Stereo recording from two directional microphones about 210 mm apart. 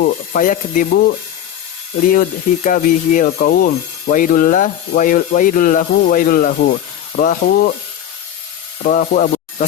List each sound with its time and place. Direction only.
0.0 s speech: 40° left (ahead or behind)
2.6 s speech: 40° left (ahead or behind)
8.8 s speech: 40° left (ahead or behind)